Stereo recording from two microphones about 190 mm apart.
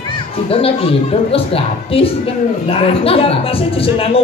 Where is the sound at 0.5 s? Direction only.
30° left (ahead or behind).